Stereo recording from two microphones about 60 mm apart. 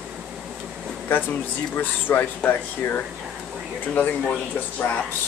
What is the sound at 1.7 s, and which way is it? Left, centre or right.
Speech, left.